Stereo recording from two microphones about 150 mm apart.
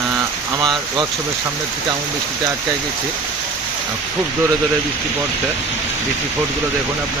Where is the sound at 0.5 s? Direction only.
30° right (ahead or behind).